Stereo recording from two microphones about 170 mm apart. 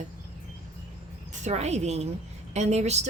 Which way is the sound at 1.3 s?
45° right (ahead or behind).